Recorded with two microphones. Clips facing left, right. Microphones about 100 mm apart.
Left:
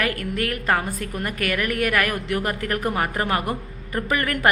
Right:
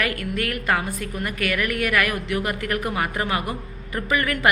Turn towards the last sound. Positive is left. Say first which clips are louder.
# even
turn(degrees=45)  # may be behind; listen again after turning